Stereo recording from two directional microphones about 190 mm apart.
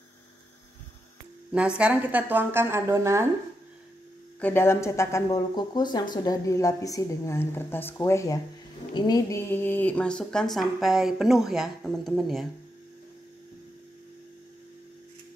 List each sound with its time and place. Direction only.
1.5 s a woman's voice: 5° right (ahead or behind)
4.4 s a woman's voice: 10° left (ahead or behind)